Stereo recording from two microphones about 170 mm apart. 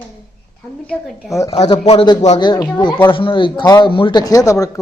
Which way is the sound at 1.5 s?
30° left (ahead or behind).